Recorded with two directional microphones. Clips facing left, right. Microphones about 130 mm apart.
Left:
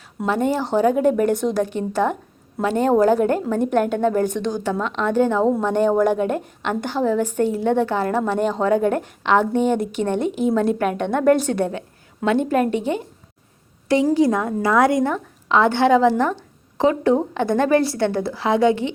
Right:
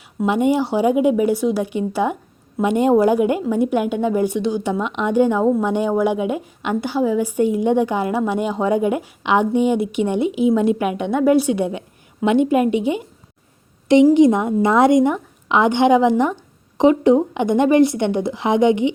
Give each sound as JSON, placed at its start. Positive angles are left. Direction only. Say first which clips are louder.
{"t": 0.3, "sound": "a woman's voice", "louder": "right 3 dB", "side_deg": -15}